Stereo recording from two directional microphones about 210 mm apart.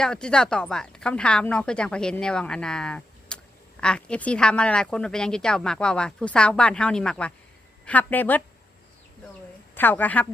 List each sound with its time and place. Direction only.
0.0 s a woman's voice: 5° left (ahead or behind)
9.7 s a woman's voice: 10° left (ahead or behind)